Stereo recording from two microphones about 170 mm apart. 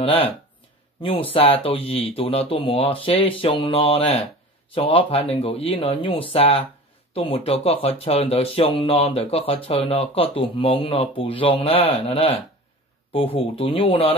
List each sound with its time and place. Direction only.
0.0 s speech: 35° left (ahead or behind)